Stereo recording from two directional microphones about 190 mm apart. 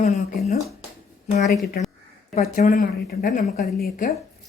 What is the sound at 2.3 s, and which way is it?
A woman's voice, 40° left (ahead or behind).